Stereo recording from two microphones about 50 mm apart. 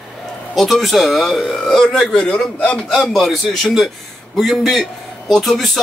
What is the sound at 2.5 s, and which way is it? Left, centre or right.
Speech, left.